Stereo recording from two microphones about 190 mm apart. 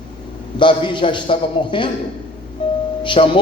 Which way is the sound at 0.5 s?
25° left (ahead or behind).